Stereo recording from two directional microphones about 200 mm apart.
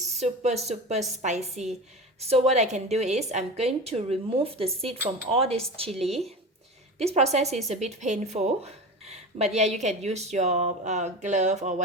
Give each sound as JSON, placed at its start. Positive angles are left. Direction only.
{"t": 0.0, "sound": "speech", "side_deg": -35}